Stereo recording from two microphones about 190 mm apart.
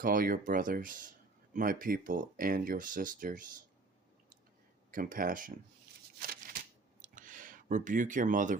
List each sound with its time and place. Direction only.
0.0 s speech: 45° right (ahead or behind)
4.9 s speech: 45° right (ahead or behind)
6.1 s a sound: 50° right (ahead or behind)